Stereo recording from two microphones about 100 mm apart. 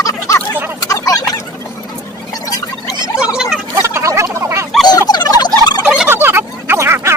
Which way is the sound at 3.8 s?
30° right (ahead or behind).